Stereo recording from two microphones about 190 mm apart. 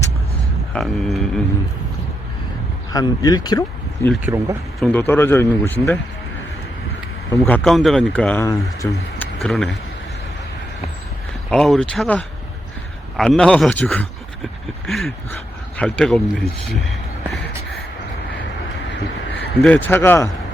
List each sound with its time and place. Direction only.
0.7 s speech: centre (ahead or behind)
2.9 s speech: 20° left (ahead or behind)
4.3 s speech: 15° right (ahead or behind)
4.8 s speech: 10° left (ahead or behind)
7.3 s speech: 10° left (ahead or behind)
11.5 s speech: centre (ahead or behind)
19.4 s a man's voice: 10° left (ahead or behind)